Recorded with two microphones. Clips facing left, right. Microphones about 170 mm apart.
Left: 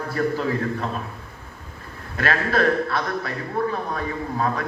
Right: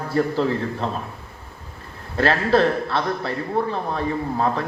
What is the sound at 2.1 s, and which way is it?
A man's voice, 30° right (ahead or behind).